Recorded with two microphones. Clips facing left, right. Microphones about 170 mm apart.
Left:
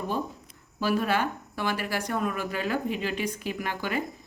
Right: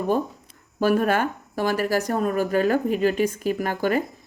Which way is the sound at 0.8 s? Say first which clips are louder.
Right 6 dB; 50° right (ahead or behind).